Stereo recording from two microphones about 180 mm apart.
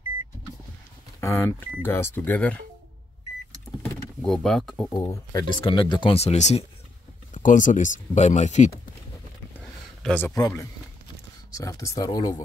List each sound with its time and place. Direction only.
1.2 s speech: 15° left (ahead or behind)
3.8 s a sound: 10° left (ahead or behind)
4.9 s speech: 20° left (ahead or behind); by 8.7 s 40° left (ahead or behind)
10.0 s speech: 10° left (ahead or behind)